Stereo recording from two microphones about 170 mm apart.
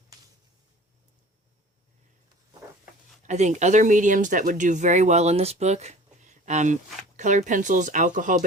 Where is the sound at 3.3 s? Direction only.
45° right (ahead or behind).